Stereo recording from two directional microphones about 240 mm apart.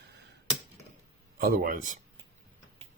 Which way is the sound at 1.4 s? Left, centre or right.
Right.